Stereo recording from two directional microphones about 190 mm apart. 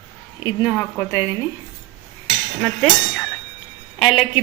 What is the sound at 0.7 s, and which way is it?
Speech, 10° left (ahead or behind).